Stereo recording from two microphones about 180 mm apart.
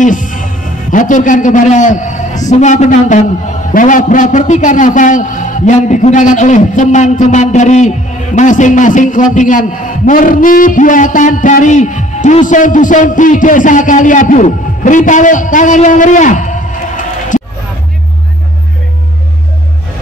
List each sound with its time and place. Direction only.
0.0 s a man's voice: 45° left (ahead or behind)